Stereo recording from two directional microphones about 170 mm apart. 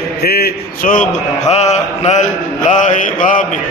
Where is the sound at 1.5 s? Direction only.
40° left (ahead or behind).